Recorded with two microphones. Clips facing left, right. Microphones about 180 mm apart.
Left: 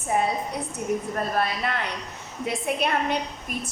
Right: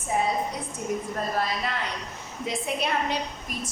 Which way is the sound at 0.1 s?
60° left (ahead or behind).